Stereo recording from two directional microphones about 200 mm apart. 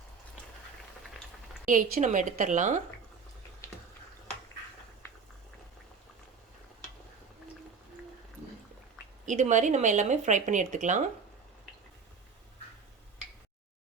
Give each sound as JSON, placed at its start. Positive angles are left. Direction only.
{"t": 1.6, "sound": "speech", "side_deg": -40}
{"t": 9.2, "sound": "speech", "side_deg": -35}